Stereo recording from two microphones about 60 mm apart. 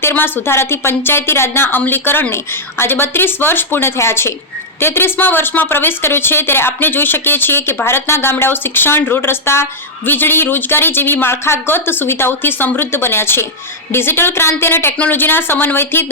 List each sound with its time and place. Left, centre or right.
0.0 s a woman's voice: left
14.9 s speech: left